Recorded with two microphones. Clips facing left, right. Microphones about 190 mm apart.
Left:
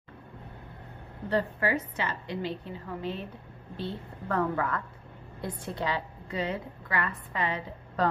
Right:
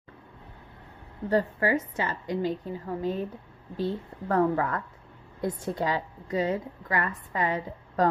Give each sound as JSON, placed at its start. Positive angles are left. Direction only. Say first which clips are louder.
{"t": 1.3, "sound": "a woman's voice", "louder": "right 3 dB", "side_deg": -45}